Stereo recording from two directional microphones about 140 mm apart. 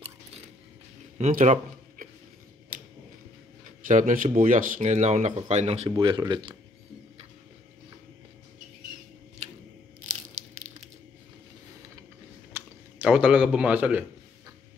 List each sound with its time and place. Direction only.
1.3 s a sound: 70° right (ahead or behind)
3.8 s speech: 70° right (ahead or behind); by 6.6 s 30° right (ahead or behind)
12.5 s speech: 10° right (ahead or behind)